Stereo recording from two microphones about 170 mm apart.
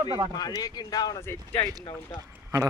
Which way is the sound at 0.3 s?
20° left (ahead or behind).